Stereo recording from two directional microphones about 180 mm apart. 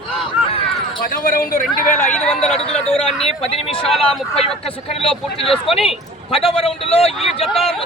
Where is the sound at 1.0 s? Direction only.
50° left (ahead or behind).